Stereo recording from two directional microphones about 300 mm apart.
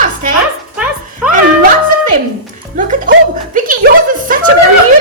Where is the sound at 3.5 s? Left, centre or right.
Right.